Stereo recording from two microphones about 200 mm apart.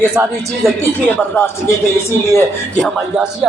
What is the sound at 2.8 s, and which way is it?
Speech, centre (ahead or behind).